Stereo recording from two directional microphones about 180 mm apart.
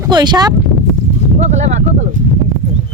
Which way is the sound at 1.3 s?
40° right (ahead or behind).